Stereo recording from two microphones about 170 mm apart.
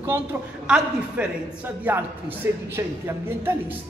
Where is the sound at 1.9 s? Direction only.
10° right (ahead or behind).